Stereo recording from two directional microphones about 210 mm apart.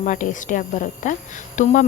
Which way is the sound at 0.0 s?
35° left (ahead or behind).